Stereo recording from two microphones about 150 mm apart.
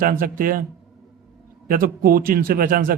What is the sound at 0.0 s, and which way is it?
Speech, 70° right (ahead or behind).